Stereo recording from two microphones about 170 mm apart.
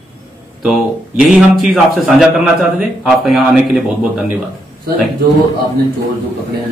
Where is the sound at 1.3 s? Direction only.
Centre (ahead or behind).